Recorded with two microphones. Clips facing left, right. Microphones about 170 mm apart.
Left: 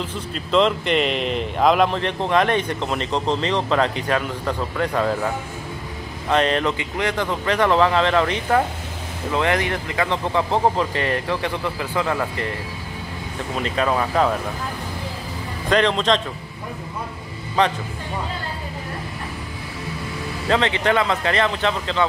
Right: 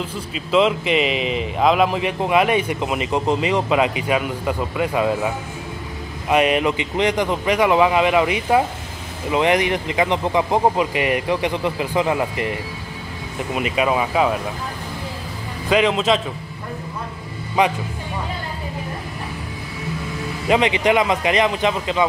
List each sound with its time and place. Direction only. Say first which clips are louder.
0.3 s a man's voice: right 1 dB; 5° right (ahead or behind)
13.6 s a man's voice: right 2 dB; 10° right (ahead or behind)
15.7 s a man's voice: right 1 dB; 5° right (ahead or behind)
17.6 s a man's voice: right 1 dB; 10° right (ahead or behind)
20.4 s a man's voice: right 3 dB; 15° right (ahead or behind)